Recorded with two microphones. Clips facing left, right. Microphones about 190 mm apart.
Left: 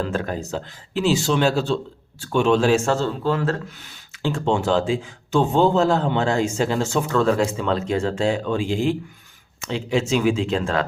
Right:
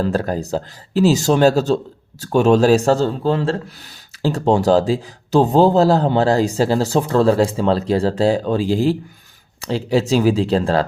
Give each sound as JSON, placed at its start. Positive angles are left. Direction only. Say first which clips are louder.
{"t": 0.0, "sound": "a man's voice", "louder": "right 5 dB", "side_deg": -35}